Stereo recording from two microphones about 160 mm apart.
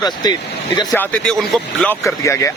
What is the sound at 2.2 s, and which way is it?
Speech, 15° left (ahead or behind).